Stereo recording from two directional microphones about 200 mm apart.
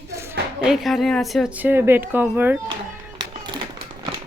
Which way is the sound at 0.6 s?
Centre (ahead or behind).